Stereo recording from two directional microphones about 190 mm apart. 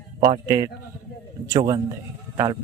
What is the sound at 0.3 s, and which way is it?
A man's voice, 20° right (ahead or behind).